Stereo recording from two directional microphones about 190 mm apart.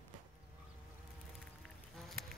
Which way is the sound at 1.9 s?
Centre (ahead or behind).